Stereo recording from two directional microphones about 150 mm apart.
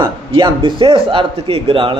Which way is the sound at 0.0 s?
35° right (ahead or behind).